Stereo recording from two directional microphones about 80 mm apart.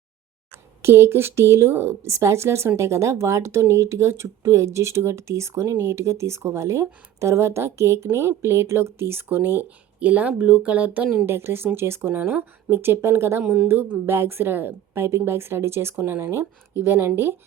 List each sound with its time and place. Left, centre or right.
0.8 s a woman's voice: right
11.3 s a woman's voice: right
13.7 s a woman's voice: right